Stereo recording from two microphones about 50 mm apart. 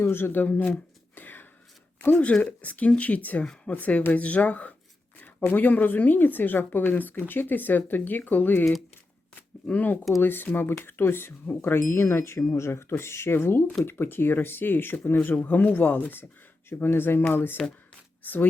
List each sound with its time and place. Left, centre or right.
0.0 s speech: left
0.4 s a woman's voice: left
1.1 s a sound: left
2.4 s a woman's voice: left
9.7 s a woman's voice: left
13.0 s speech: left
15.4 s a woman's voice: left
16.6 s speech: left